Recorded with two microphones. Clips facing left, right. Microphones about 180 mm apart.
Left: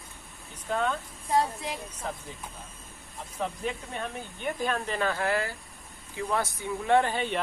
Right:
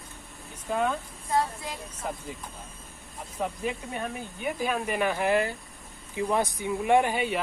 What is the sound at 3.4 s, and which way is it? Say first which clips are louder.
Speech: right 2 dB; 10° right (ahead or behind).